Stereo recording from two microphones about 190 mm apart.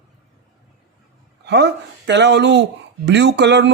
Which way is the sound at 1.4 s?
65° right (ahead or behind).